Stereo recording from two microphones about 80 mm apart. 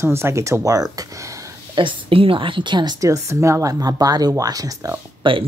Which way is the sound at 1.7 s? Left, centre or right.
Right.